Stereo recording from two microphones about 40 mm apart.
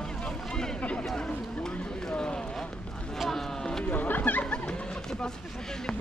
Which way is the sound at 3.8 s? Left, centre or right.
Left.